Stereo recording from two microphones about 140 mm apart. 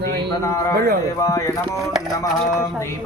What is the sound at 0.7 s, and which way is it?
Speech, 90° right.